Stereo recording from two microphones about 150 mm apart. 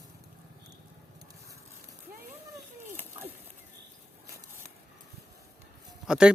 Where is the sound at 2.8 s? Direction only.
15° right (ahead or behind).